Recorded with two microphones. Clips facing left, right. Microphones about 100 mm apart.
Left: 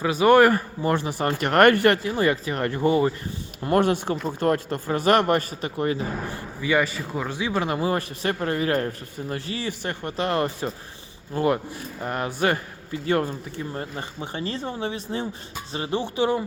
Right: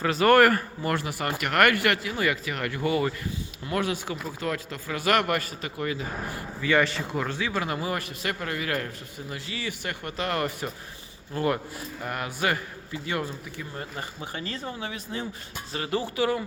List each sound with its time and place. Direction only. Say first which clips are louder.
0.0 s a man's voice: left 3 dB; 15° left (ahead or behind)
3.6 s a man's voice: left 8 dB; 50° left (ahead or behind); by 6.4 s 30° left (ahead or behind)
6.6 s a man's voice: left 1 dB; 10° left (ahead or behind)